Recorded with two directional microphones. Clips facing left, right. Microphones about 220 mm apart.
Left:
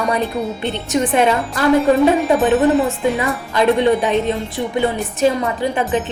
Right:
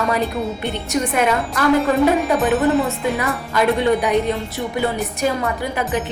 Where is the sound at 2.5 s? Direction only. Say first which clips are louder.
Left 3 dB; centre (ahead or behind).